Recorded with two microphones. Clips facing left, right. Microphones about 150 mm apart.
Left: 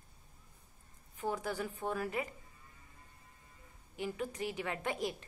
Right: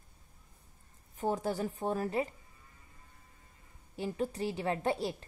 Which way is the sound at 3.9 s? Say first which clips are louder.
Right 4 dB; 35° right (ahead or behind).